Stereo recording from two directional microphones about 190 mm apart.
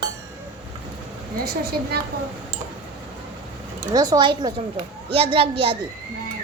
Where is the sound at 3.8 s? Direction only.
20° right (ahead or behind).